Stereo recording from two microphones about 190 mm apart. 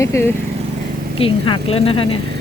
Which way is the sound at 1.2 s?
30° left (ahead or behind).